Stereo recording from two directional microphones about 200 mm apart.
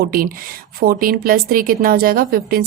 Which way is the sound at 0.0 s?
45° right (ahead or behind).